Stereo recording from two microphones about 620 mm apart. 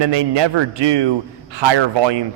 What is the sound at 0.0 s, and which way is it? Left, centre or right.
A man's voice, right.